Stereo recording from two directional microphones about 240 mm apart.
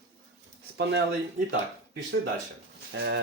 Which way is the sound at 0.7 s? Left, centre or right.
Right.